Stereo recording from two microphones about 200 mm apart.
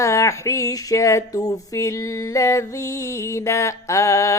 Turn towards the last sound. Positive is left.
turn(degrees=15)  # may be behind; listen again after turning